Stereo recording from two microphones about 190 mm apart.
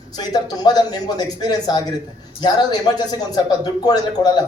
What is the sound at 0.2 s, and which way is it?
A man's voice, 20° left (ahead or behind).